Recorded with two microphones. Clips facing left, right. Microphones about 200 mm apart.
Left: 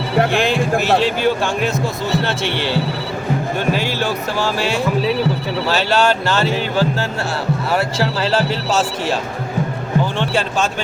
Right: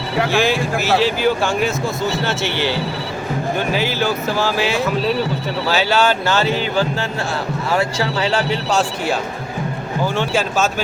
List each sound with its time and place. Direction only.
0.2 s speech: 55° left (ahead or behind)
0.9 s speech: 5° right (ahead or behind)
3.7 s speech: centre (ahead or behind)